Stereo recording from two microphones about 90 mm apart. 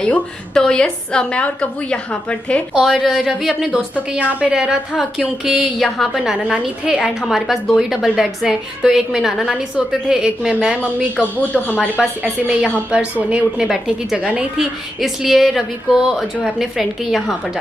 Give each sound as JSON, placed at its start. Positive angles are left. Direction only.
{"t": 0.0, "sound": "a woman's voice", "side_deg": 10}
{"t": 2.7, "sound": "a woman's voice", "side_deg": 0}
{"t": 11.5, "sound": "a woman's voice", "side_deg": 15}
{"t": 12.2, "sound": "a woman's voice", "side_deg": -15}